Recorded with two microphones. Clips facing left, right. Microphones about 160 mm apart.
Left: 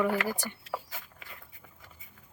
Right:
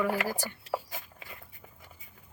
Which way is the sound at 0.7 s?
25° right (ahead or behind).